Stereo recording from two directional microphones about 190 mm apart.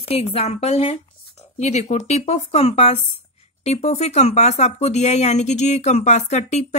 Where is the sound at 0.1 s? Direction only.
30° left (ahead or behind).